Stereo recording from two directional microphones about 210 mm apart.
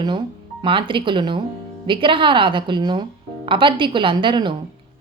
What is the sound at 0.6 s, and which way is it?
A woman's voice, 25° right (ahead or behind).